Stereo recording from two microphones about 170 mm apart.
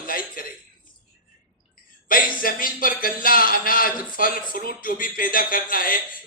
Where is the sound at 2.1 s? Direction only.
55° left (ahead or behind).